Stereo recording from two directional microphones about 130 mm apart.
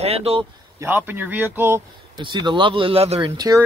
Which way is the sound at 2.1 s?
35° right (ahead or behind).